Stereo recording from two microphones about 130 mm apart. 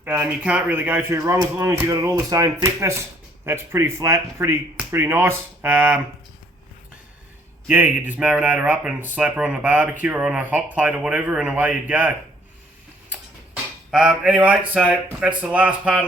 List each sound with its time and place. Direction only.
0.0 s speech: 15° right (ahead or behind)
7.7 s speech: 15° right (ahead or behind)
13.9 s speech: 5° right (ahead or behind)